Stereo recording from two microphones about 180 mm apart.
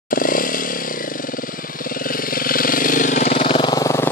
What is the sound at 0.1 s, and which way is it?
Chainsaw, 50° left (ahead or behind).